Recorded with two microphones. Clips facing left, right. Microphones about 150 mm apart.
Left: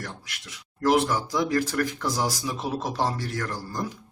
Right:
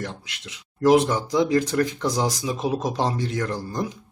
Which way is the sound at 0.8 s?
15° right (ahead or behind).